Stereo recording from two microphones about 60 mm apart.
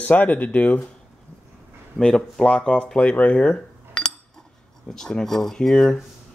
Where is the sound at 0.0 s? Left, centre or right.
Left.